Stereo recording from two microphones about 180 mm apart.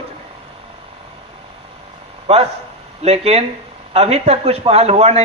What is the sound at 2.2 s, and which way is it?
A man's voice, 35° right (ahead or behind).